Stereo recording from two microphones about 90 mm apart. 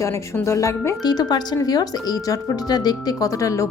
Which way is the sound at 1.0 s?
50° left (ahead or behind).